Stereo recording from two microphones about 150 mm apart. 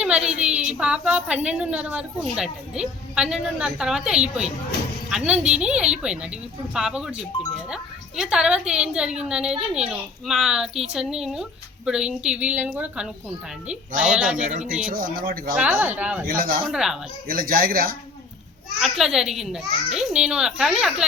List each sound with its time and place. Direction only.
0.3 s a woman's voice: 10° right (ahead or behind)
14.3 s speech: 55° right (ahead or behind)
14.8 s speech: 70° right (ahead or behind)
15.5 s a woman's voice: 10° right (ahead or behind)
16.2 s speech: 75° right (ahead or behind)
16.6 s a woman's voice: 5° right (ahead or behind)
17.2 s speech: 75° right (ahead or behind)
18.8 s a woman's voice: 5° right (ahead or behind)